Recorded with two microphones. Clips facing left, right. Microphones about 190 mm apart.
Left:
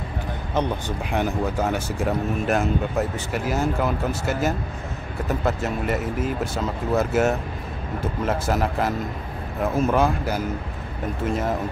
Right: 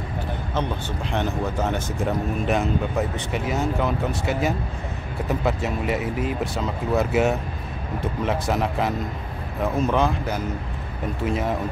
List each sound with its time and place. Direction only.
1.1 s speech: 10° left (ahead or behind)